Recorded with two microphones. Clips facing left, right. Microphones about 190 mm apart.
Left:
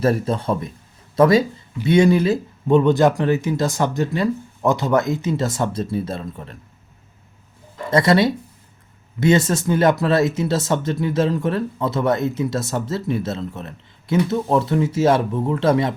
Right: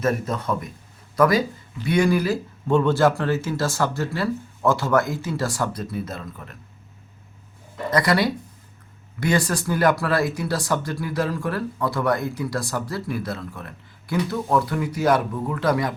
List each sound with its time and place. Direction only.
0.0 s speech: 30° left (ahead or behind)
7.9 s speech: 25° left (ahead or behind)